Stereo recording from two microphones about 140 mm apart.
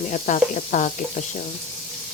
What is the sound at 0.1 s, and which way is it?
Sizzle, 65° left (ahead or behind).